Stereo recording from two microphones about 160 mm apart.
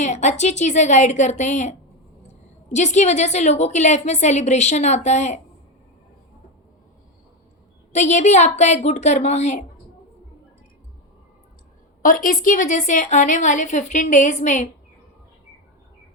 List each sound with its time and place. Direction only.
0.0 s a woman's voice: 50° left (ahead or behind)
2.7 s a woman's voice: 45° left (ahead or behind)
7.9 s a woman's voice: 45° left (ahead or behind)
12.0 s a woman's voice: 60° left (ahead or behind)